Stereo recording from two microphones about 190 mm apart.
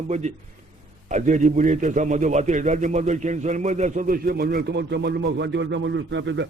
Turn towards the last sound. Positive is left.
turn(degrees=-70)  # may be behind; listen again after turning